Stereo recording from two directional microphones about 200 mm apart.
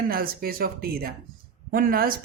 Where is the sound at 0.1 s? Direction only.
45° right (ahead or behind).